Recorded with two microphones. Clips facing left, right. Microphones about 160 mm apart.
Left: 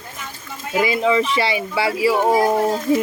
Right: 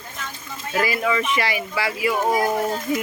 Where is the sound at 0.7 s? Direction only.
20° left (ahead or behind).